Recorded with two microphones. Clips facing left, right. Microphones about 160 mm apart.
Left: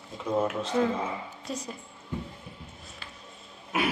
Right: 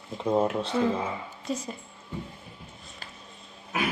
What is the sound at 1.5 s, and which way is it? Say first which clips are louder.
Speech: right 4 dB; centre (ahead or behind).